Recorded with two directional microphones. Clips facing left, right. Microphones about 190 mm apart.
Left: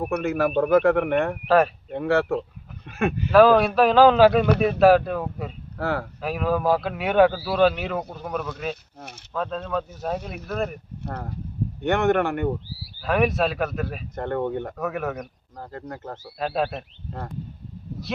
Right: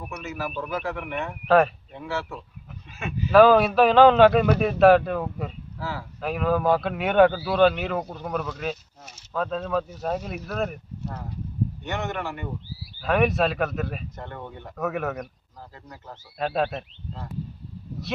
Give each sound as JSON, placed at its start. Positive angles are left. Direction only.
{"t": 0.0, "sound": "speech", "side_deg": 60}
{"t": 1.5, "sound": "speech", "side_deg": 0}
{"t": 1.9, "sound": "speech", "side_deg": 60}
{"t": 3.3, "sound": "speech", "side_deg": 0}
{"t": 5.7, "sound": "speech", "side_deg": 60}
{"t": 6.2, "sound": "speech", "side_deg": 0}
{"t": 8.7, "sound": "speech", "side_deg": 60}
{"t": 9.3, "sound": "speech", "side_deg": 0}
{"t": 11.0, "sound": "speech", "side_deg": 60}
{"t": 13.0, "sound": "speech", "side_deg": 0}
{"t": 14.2, "sound": "speech", "side_deg": 60}
{"t": 14.8, "sound": "speech", "side_deg": 0}
{"t": 15.5, "sound": "speech", "side_deg": 55}
{"t": 16.4, "sound": "speech", "side_deg": 5}